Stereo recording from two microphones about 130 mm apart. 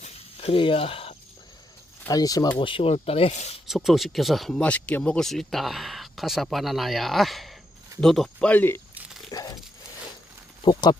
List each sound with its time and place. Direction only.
0.0 s cricket: 50° left (ahead or behind)
2.0 s speech: 30° left (ahead or behind)
2.6 s speech: 40° left (ahead or behind)
3.7 s speech: centre (ahead or behind); by 8.8 s 15° left (ahead or behind)
9.3 s dog: 30° left (ahead or behind)
10.7 s speech: 35° left (ahead or behind)